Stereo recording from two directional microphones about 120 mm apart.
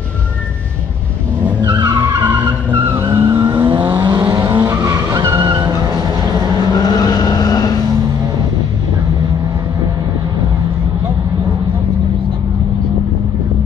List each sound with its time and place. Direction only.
1.6 s skidding: 35° right (ahead or behind)
2.2 s vehicle: 20° right (ahead or behind)
3.3 s vehicle: 40° right (ahead or behind)
6.8 s vehicle: 30° left (ahead or behind)